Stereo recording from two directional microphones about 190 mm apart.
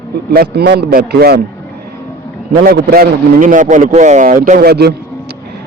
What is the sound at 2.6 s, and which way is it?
A man's voice, 50° right (ahead or behind).